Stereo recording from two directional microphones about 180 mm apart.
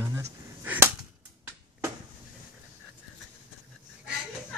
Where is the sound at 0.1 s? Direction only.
15° right (ahead or behind).